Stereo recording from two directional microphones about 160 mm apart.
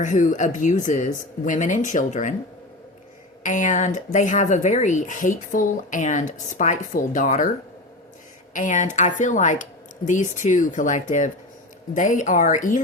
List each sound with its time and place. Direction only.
0.0 s speech: 50° left (ahead or behind)
3.4 s speech: 50° left (ahead or behind)
8.5 s speech: 50° left (ahead or behind)